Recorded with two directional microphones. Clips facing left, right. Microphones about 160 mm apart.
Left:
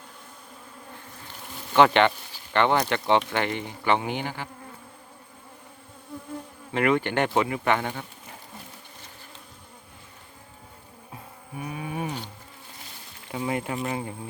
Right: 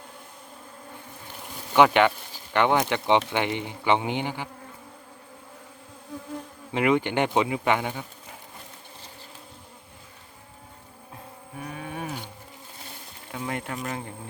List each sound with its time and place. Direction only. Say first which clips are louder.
1.7 s speech: even; 10° right (ahead or behind)
6.7 s speech: even; 15° right (ahead or behind)
11.6 s music: left 3 dB; 5° left (ahead or behind)
13.3 s a sound: left 3 dB; 5° left (ahead or behind)